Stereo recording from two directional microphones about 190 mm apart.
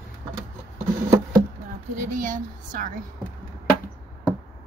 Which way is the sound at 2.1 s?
45° right (ahead or behind).